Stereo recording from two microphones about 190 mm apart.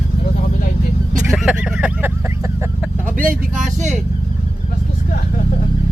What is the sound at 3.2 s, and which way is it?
Speech, 45° right (ahead or behind).